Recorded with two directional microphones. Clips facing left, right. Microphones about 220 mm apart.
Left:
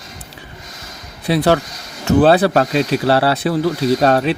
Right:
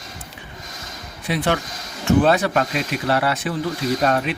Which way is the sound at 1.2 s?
35° left (ahead or behind).